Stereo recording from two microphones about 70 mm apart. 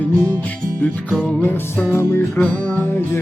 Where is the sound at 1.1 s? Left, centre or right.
Left.